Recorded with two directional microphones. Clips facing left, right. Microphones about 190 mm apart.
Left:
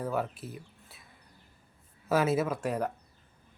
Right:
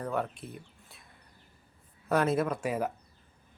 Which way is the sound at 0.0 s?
5° left (ahead or behind).